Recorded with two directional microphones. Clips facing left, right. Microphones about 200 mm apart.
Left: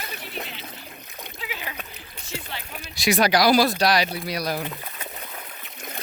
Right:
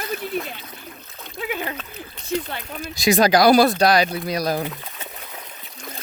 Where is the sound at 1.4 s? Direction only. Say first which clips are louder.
Right 9 dB; 50° right (ahead or behind).